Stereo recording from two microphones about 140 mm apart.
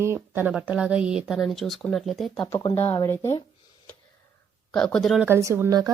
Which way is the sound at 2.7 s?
15° left (ahead or behind).